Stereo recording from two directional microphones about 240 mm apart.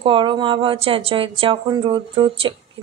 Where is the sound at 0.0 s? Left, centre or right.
Right.